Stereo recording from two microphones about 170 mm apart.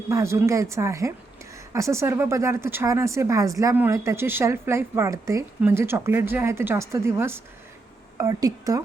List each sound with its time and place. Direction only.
0.1 s a woman's voice: 15° right (ahead or behind)